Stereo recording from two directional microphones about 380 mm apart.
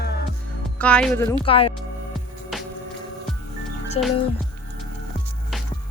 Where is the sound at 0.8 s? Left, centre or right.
Centre.